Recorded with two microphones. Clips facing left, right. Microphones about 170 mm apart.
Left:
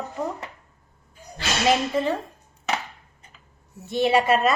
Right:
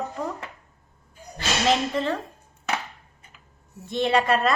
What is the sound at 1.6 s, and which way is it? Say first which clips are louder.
Speech: left 2 dB; 10° left (ahead or behind).